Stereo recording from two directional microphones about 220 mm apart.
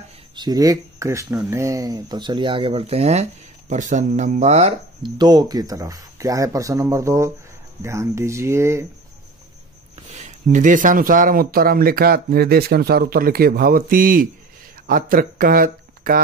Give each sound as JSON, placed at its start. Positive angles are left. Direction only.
{"t": 0.4, "sound": "speech", "side_deg": -15}
{"t": 10.0, "sound": "speech", "side_deg": -35}